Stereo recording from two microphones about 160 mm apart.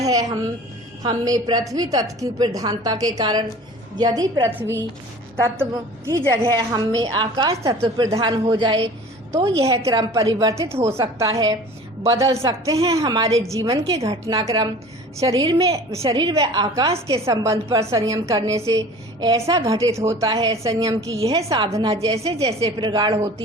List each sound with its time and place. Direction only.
0.0 s a woman's voice: 20° right (ahead or behind)
6.1 s a woman's voice: 20° right (ahead or behind)
7.8 s a woman's voice: 35° right (ahead or behind)
16.7 s a woman's voice: 35° right (ahead or behind)
17.1 s a woman's voice: 20° right (ahead or behind)
22.2 s a woman's voice: 40° right (ahead or behind)